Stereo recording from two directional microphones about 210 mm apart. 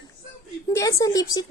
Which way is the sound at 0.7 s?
15° left (ahead or behind).